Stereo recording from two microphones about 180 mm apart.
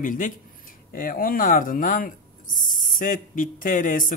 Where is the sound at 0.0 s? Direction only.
50° left (ahead or behind).